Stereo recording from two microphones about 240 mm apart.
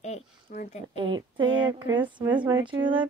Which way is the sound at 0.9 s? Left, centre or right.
Centre.